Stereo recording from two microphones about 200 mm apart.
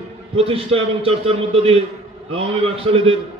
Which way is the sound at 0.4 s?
30° right (ahead or behind).